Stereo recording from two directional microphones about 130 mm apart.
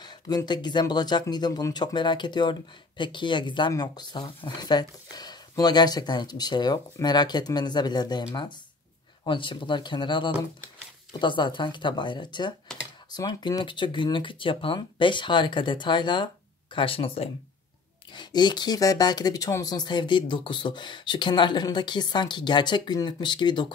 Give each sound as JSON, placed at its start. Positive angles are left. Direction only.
{"t": 0.0, "sound": "speech", "side_deg": 30}